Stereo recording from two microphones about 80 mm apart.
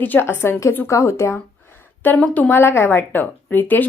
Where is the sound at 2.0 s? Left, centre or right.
Left.